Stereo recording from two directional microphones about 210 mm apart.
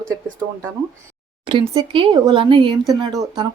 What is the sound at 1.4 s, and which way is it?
Speech, 25° right (ahead or behind).